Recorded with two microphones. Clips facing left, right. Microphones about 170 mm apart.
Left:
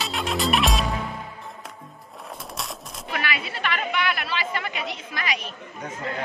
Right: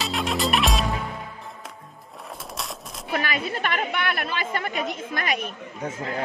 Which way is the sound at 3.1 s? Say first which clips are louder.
Right 3 dB; 45° right (ahead or behind).